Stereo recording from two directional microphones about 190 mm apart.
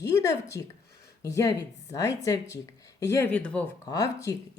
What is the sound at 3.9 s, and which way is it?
Speech, 20° left (ahead or behind).